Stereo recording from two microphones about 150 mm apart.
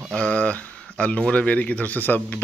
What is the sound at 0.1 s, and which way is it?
Speech, 5° left (ahead or behind).